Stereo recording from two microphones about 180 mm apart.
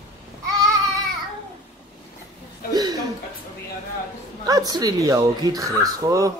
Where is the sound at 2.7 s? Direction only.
20° right (ahead or behind).